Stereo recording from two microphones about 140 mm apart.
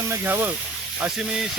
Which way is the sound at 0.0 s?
20° right (ahead or behind).